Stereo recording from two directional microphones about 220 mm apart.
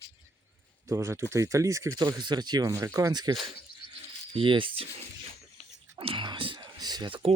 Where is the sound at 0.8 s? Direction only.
15° right (ahead or behind).